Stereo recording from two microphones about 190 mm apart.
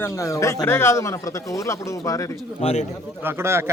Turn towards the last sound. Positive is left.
turn(degrees=-15)  # may be behind; listen again after turning